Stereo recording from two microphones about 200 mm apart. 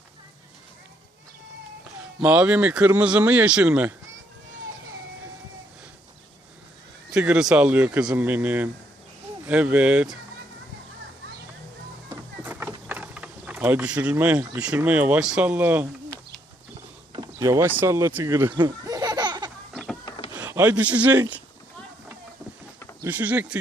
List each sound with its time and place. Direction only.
2.2 s speech: 5° right (ahead or behind)
7.1 s speech: 5° right (ahead or behind)
12.1 s a sound: 10° right (ahead or behind)
17.1 s speech: 20° right (ahead or behind)
18.5 s laughter: 20° right (ahead or behind)
19.7 s power windows: centre (ahead or behind)
20.1 s a sound: 20° left (ahead or behind)
20.3 s speech: 10° right (ahead or behind)
23.0 s speech: 10° right (ahead or behind)